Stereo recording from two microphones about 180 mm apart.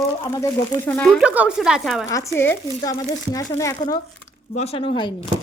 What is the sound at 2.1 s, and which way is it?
Speech, 15° left (ahead or behind).